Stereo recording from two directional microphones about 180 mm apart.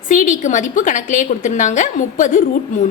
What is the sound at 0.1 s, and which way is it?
A woman's voice, 45° left (ahead or behind).